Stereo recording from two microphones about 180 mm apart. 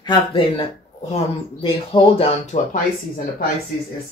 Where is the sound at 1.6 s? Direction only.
30° left (ahead or behind).